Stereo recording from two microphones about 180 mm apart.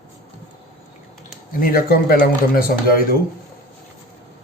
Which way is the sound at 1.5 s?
55° left (ahead or behind).